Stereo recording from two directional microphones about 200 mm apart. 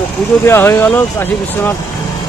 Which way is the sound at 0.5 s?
10° left (ahead or behind).